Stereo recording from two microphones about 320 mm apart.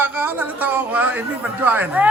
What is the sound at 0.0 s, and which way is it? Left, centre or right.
A man's voice, centre.